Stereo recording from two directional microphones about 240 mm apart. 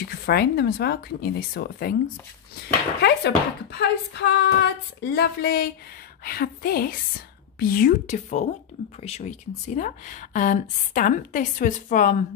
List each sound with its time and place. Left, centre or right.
0.0 s speech: left